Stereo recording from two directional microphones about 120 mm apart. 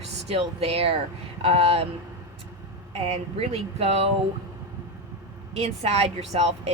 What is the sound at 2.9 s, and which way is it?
A woman's voice, 55° right (ahead or behind).